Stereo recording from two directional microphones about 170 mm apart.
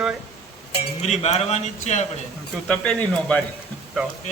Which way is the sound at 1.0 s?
40° left (ahead or behind).